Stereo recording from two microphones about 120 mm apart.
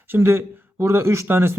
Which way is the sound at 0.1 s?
20° right (ahead or behind).